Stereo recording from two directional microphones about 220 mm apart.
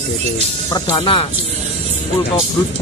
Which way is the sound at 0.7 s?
20° left (ahead or behind).